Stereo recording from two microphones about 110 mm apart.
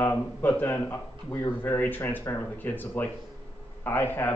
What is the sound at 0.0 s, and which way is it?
Speech, 20° left (ahead or behind).